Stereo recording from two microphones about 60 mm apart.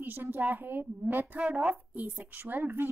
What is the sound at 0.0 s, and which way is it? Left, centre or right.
A woman's voice, right.